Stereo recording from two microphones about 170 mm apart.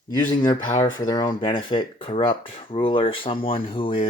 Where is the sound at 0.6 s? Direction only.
40° left (ahead or behind).